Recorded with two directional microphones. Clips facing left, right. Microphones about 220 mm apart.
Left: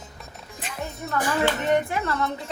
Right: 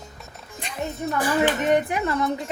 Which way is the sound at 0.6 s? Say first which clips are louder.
Even; 5° left (ahead or behind).